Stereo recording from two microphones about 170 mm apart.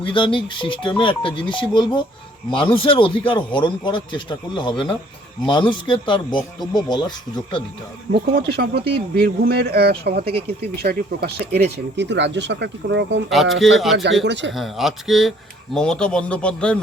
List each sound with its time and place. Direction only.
0.0 s speech: 30° left (ahead or behind)
8.1 s speech: 75° right (ahead or behind)
11.9 s speech: 90° right
13.3 s speech: centre (ahead or behind)
14.3 s speech: 90° right
14.5 s speech: centre (ahead or behind)